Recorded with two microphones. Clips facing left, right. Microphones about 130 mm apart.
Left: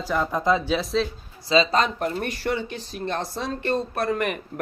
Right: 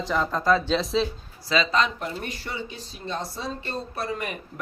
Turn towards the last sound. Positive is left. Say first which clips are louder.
# left 6 dB
turn(degrees=60)  # may be behind; listen again after turning